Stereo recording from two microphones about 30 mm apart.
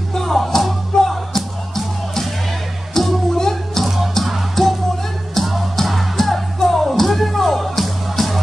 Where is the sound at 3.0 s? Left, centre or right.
Centre.